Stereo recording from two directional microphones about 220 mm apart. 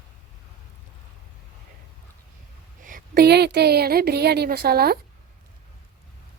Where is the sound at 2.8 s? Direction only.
40° right (ahead or behind).